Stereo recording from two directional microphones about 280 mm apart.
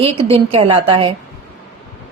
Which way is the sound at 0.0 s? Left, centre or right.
Centre.